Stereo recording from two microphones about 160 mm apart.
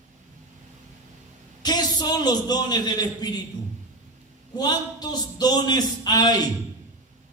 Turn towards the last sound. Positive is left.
turn(degrees=25)  # may be behind; listen again after turning